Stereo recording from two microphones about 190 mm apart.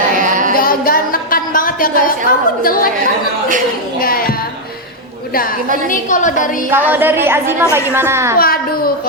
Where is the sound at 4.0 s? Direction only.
50° left (ahead or behind).